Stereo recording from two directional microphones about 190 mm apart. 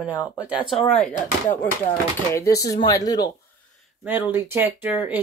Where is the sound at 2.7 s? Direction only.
20° left (ahead or behind).